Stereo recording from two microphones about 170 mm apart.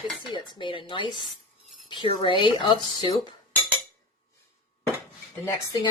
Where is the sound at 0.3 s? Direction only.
30° left (ahead or behind).